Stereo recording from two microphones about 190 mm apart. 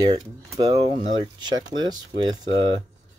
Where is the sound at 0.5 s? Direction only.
20° right (ahead or behind).